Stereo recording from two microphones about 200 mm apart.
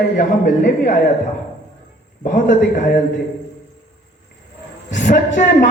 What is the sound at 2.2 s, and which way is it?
Speech, 40° left (ahead or behind).